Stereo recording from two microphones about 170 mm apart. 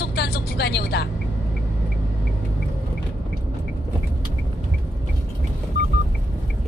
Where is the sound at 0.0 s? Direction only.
70° left (ahead or behind).